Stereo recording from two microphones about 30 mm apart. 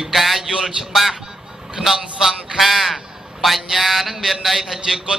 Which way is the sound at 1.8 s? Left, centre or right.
Centre.